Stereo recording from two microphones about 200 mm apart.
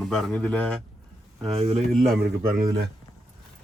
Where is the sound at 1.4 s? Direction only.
30° right (ahead or behind).